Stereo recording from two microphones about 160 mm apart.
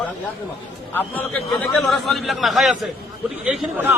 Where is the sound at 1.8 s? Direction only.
Centre (ahead or behind).